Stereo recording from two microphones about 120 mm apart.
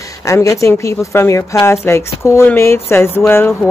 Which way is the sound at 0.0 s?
25° left (ahead or behind).